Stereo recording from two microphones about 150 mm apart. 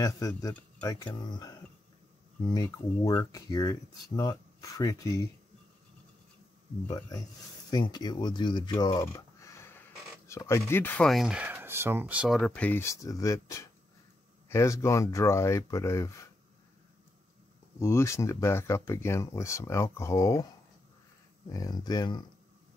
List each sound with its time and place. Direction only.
0.8 s speech: 25° left (ahead or behind)
6.9 s speech: 20° left (ahead or behind)
9.0 s a sound: 20° left (ahead or behind)
10.7 s speech: 15° left (ahead or behind)
11.1 s speech: 5° right (ahead or behind); by 16.3 s 20° left (ahead or behind)
17.7 s speech: 20° left (ahead or behind)
21.5 s speech: 25° left (ahead or behind)